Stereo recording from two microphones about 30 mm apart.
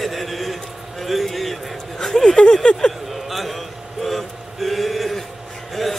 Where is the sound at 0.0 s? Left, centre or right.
Centre.